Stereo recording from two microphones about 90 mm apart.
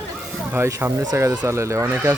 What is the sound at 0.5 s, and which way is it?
Speech, 30° right (ahead or behind).